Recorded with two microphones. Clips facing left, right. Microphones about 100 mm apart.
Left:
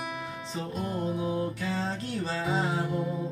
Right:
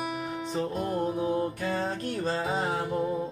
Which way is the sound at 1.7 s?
50° right (ahead or behind).